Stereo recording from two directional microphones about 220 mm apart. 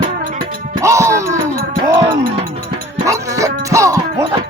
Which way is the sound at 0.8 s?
15° right (ahead or behind).